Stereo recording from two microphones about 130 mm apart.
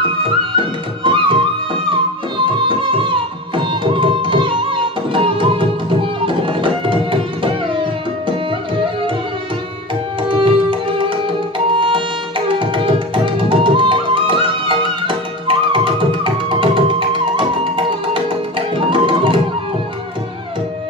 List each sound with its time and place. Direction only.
0.2 s music: 40° right (ahead or behind)
3.5 s tabla: 40° right (ahead or behind)
5.1 s music: 40° right (ahead or behind)
7.8 s tabla: 40° right (ahead or behind)
10.2 s tabla: 40° right (ahead or behind)
12.4 s music: 40° right (ahead or behind)